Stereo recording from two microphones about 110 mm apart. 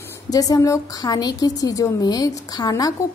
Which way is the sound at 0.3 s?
35° left (ahead or behind).